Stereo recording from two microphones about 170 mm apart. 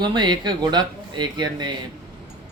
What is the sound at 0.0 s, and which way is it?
Speech, 25° right (ahead or behind).